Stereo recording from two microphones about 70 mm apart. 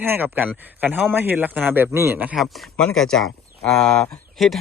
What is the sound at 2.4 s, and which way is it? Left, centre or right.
Speech, centre.